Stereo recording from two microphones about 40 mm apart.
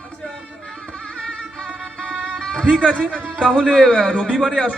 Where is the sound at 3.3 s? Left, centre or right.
Centre.